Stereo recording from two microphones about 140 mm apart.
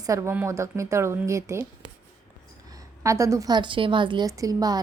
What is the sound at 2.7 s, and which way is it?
A woman's voice, 20° right (ahead or behind).